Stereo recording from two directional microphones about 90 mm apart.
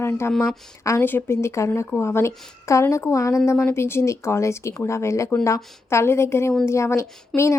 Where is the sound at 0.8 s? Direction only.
30° left (ahead or behind).